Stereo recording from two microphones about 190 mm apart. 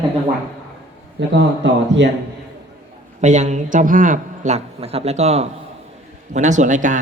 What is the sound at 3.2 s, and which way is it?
A man's voice, 40° right (ahead or behind).